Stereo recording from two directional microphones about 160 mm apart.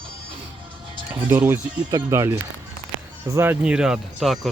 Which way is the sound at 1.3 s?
10° right (ahead or behind).